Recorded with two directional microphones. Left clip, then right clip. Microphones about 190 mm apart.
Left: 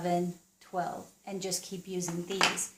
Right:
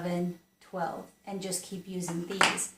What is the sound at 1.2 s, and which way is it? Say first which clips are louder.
Speech: left 2 dB; 45° left (ahead or behind).